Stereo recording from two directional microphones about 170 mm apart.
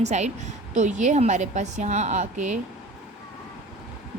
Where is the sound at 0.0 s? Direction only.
40° right (ahead or behind).